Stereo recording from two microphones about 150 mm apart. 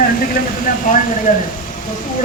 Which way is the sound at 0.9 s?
65° left (ahead or behind).